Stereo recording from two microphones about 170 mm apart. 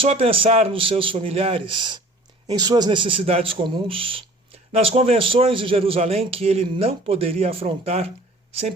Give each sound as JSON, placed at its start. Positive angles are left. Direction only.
{"t": 0.0, "sound": "a man's voice", "side_deg": -35}